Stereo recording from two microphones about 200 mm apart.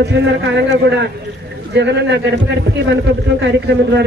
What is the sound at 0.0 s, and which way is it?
A man's voice, 60° right (ahead or behind).